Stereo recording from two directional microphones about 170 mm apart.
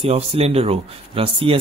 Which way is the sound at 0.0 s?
35° right (ahead or behind).